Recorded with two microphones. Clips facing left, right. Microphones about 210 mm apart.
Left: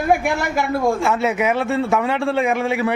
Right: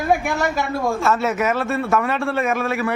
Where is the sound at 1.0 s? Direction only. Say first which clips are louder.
Left 1 dB; 15° left (ahead or behind).